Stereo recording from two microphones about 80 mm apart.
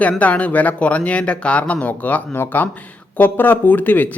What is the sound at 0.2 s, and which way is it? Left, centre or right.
Speech, centre.